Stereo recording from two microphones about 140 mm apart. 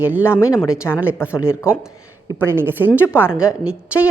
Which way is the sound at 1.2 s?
20° left (ahead or behind).